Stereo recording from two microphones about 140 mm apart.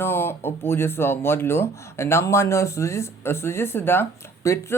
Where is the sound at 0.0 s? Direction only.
15° left (ahead or behind).